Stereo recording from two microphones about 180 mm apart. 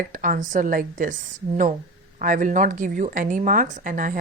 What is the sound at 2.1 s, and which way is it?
A woman's voice, 50° right (ahead or behind).